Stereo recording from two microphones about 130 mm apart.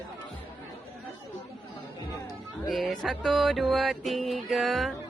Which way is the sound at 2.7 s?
Centre (ahead or behind).